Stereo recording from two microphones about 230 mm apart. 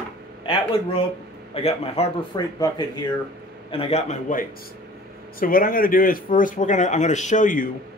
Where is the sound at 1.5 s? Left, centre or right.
Left.